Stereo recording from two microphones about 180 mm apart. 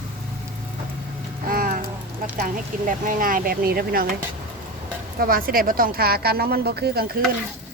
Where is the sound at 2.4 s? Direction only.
50° right (ahead or behind).